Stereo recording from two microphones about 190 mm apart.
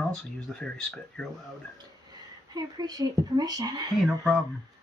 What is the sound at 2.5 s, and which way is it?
Speech, 20° right (ahead or behind).